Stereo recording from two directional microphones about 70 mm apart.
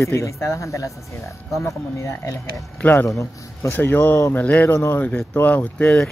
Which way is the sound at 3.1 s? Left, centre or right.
Left.